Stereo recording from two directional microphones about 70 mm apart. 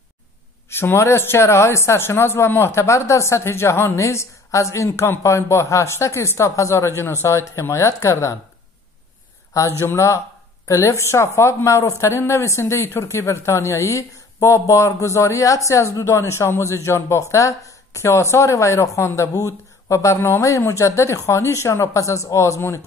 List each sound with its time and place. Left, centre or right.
0.7 s speech: left
9.5 s speech: left